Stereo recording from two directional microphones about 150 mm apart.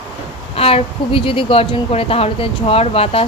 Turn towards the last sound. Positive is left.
turn(degrees=40)  # may be behind; listen again after turning